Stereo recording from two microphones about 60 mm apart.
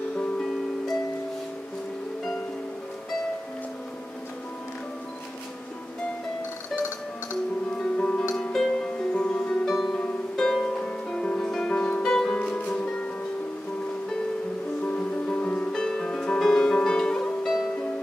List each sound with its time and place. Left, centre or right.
7.8 s music: centre
9.7 s music: centre
14.8 s music: centre
15.7 s music: centre